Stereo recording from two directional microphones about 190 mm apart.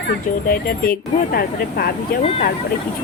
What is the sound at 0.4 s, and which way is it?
Speech, 50° left (ahead or behind).